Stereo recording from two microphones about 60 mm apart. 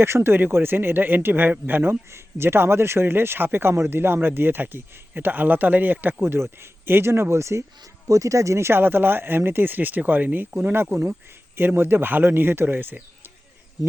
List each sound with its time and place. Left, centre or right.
0.0 s speech: right
8.0 s speech: right